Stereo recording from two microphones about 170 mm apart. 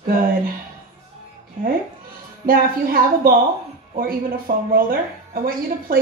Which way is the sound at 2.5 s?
55° right (ahead or behind).